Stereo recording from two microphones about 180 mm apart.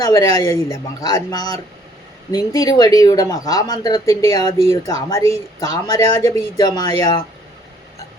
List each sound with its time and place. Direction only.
0.0 s speech: 20° left (ahead or behind)